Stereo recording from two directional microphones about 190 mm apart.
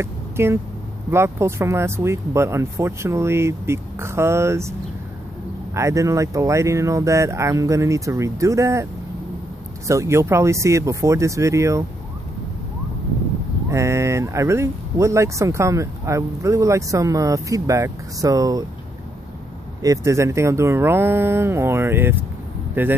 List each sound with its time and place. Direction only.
0.0 s a sound: 15° right (ahead or behind)
1.1 s speech: 15° right (ahead or behind)
5.8 s speech: 15° right (ahead or behind)
9.8 s speech: 15° right (ahead or behind)
13.7 s speech: 15° right (ahead or behind)
19.8 s speech: 15° right (ahead or behind)